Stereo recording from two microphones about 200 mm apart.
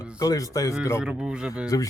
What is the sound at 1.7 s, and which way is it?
Speech, 20° left (ahead or behind).